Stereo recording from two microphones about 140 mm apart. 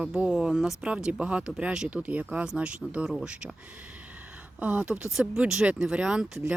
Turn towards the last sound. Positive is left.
turn(degrees=-5)  # may be behind; listen again after turning